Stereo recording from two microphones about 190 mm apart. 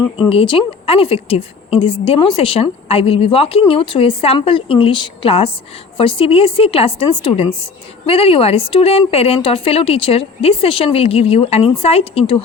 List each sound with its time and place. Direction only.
0.3 s a woman's voice: 30° left (ahead or behind)